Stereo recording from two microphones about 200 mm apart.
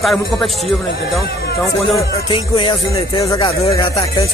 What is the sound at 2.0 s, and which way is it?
Music, 25° left (ahead or behind).